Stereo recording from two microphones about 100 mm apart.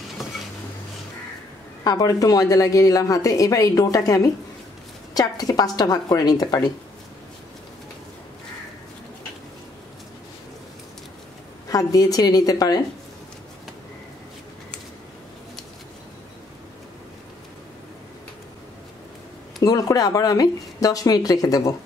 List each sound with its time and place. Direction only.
0.2 s a sound: centre (ahead or behind)
1.9 s a woman's voice: 35° left (ahead or behind)
11.7 s a woman's voice: 35° left (ahead or behind)
19.6 s a woman's voice: 40° left (ahead or behind)